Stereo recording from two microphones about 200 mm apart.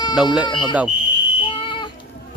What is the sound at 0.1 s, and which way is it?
Speech, 5° right (ahead or behind).